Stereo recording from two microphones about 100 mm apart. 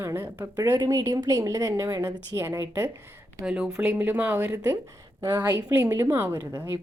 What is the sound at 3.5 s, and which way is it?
A woman's voice, 10° right (ahead or behind).